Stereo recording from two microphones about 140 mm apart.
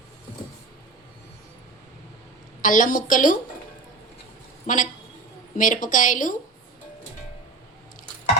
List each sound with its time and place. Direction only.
2.6 s a woman's voice: 70° left (ahead or behind)
4.6 s a woman's voice: 70° left (ahead or behind)